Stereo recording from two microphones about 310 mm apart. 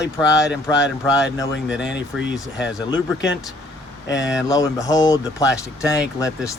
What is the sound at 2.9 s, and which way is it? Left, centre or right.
Speech, left.